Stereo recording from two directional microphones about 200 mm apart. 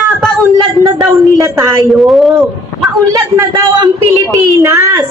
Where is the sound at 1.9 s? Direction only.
Centre (ahead or behind).